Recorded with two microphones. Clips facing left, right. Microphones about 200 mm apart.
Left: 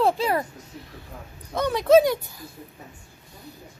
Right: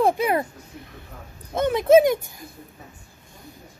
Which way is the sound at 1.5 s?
20° right (ahead or behind).